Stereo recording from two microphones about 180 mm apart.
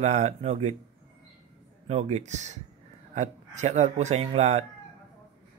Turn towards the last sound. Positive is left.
turn(degrees=-40)  # may be behind; listen again after turning